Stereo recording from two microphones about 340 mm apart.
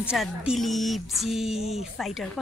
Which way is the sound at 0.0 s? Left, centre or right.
Centre.